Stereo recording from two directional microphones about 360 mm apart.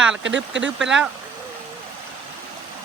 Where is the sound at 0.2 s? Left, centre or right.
Right.